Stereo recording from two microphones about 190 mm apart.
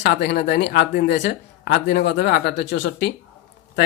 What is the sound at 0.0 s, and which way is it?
Speech, 60° left (ahead or behind).